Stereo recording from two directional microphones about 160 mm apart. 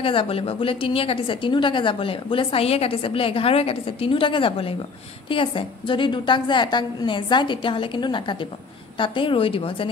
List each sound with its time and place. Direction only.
0.0 s a woman's voice: 35° left (ahead or behind)